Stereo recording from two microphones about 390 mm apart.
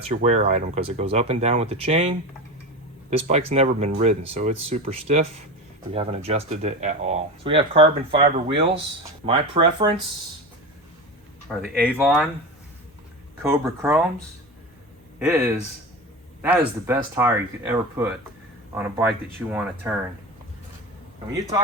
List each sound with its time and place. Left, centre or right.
0.0 s speech: centre
11.8 s speech: centre
13.5 s speech: centre
15.2 s speech: centre